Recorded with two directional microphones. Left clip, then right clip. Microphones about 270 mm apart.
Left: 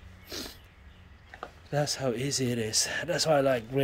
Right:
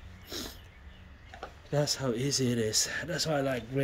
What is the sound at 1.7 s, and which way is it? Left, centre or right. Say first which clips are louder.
Speech: left 1 dB; centre.